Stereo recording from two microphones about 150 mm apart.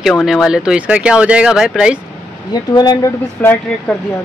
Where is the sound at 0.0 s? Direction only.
Centre (ahead or behind).